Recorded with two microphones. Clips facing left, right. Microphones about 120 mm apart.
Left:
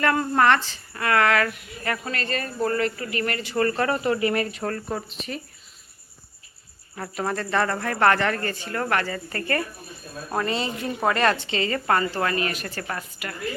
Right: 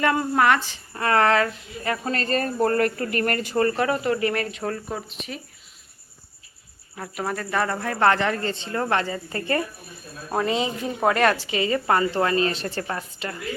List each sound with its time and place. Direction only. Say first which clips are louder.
0.0 s speech: even; 15° right (ahead or behind)
0.3 s speech: left 2 dB; 5° right (ahead or behind)
0.9 s a woman's voice: right 2 dB; 30° right (ahead or behind)
2.0 s speech: right 5 dB; 35° right (ahead or behind)
3.5 s a woman's voice: right 1 dB; 25° right (ahead or behind)
4.1 s speech: left 1 dB; 10° left (ahead or behind)
4.6 s speech: left 1 dB; 5° right (ahead or behind)
6.9 s speech: left 1 dB; 5° right (ahead or behind)
10.2 s a woman's voice: right 3 dB; 10° right (ahead or behind); by 13.3 s 25° right (ahead or behind)